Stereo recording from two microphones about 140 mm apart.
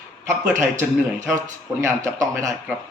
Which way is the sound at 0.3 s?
20° right (ahead or behind).